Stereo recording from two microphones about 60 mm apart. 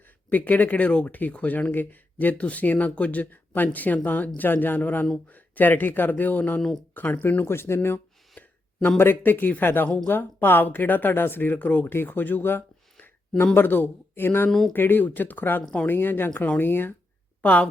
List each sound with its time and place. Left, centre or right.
0.3 s speech: left
6.6 s speech: centre
6.9 s speech: left
7.9 s a sound: left
9.0 s speech: left
17.4 s speech: left